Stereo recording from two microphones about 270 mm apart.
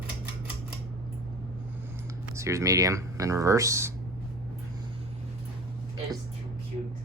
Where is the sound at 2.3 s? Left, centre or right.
Centre.